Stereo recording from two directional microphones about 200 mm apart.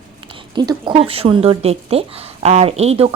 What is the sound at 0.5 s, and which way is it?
Speech, 20° right (ahead or behind).